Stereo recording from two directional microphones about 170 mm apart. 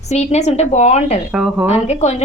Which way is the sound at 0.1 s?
40° left (ahead or behind).